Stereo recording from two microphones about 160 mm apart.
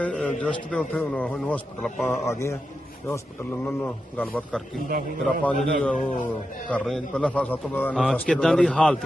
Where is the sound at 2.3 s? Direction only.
15° left (ahead or behind).